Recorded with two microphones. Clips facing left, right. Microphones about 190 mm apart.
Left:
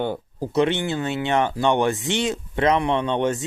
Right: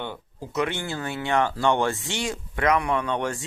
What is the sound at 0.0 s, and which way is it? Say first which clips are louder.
Speech: left 9 dB; 40° left (ahead or behind).